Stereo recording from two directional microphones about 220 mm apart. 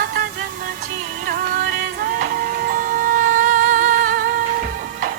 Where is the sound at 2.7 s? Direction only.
40° right (ahead or behind).